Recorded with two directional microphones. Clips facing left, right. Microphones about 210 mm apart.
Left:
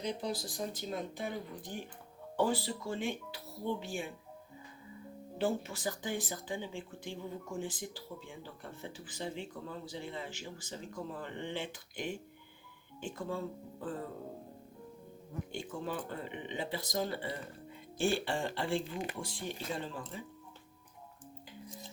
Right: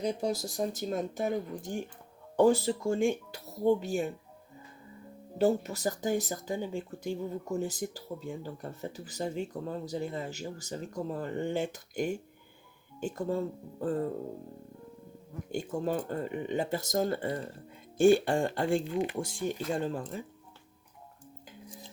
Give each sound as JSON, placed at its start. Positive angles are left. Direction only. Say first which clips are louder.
{"t": 0.0, "sound": "speech", "louder": "right 6 dB", "side_deg": -45}
{"t": 5.4, "sound": "speech", "louder": "right 7 dB", "side_deg": -40}
{"t": 15.5, "sound": "speech", "louder": "right 9 dB", "side_deg": -40}